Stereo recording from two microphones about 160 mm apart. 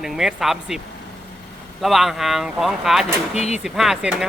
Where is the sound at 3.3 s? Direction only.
45° left (ahead or behind).